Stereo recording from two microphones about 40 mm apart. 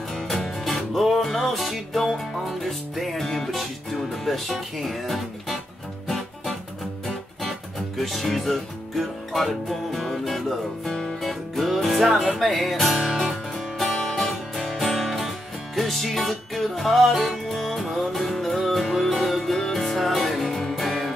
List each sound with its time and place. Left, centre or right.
0.1 s music: centre
8.0 s speech: centre
10.9 s music: centre
11.1 s music: centre